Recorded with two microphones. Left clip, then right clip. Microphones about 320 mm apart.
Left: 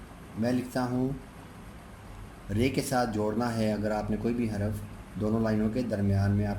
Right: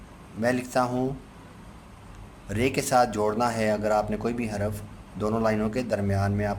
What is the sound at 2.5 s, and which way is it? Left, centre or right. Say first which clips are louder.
A man's voice: right 6 dB; right.